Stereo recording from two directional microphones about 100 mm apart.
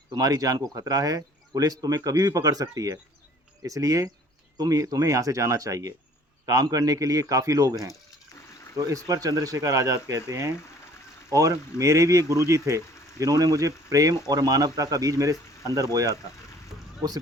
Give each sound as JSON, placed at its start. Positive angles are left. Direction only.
{"t": 0.1, "sound": "speech", "side_deg": -40}